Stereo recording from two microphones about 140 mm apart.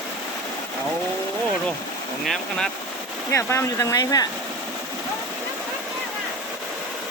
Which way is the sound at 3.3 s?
20° left (ahead or behind).